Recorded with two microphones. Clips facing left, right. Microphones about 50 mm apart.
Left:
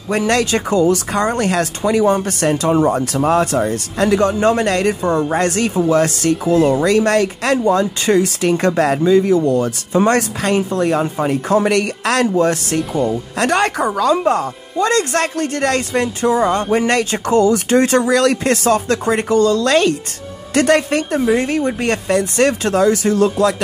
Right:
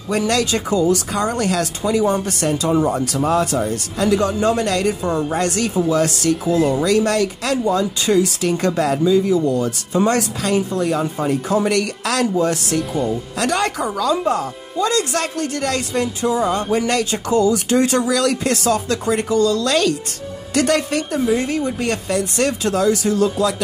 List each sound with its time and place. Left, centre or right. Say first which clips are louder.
0.3 s speech: left 4 dB; left